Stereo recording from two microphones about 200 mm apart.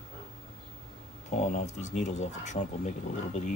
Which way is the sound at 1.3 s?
35° left (ahead or behind).